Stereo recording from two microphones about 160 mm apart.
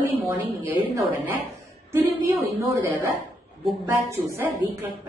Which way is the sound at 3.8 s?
10° right (ahead or behind).